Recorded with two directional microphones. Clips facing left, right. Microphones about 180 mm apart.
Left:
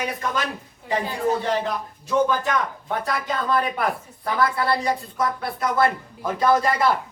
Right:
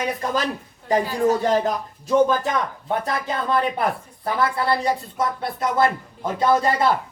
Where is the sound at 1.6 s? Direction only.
35° right (ahead or behind).